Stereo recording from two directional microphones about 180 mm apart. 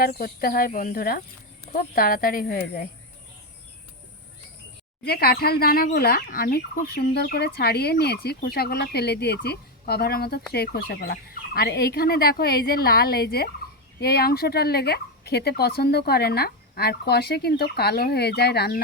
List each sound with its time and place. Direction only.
0.0 s speech: 55° left (ahead or behind)
5.0 s speech: 60° left (ahead or behind)